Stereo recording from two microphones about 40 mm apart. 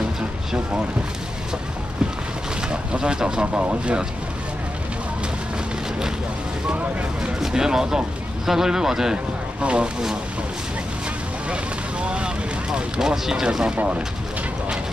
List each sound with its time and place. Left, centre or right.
2.7 s speech: right
7.3 s speech: centre
9.1 s speech: right
11.4 s speech: right